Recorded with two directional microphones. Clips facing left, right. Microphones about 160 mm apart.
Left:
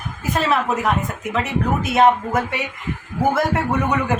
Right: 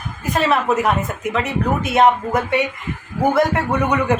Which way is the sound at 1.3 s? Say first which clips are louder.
Even; centre (ahead or behind).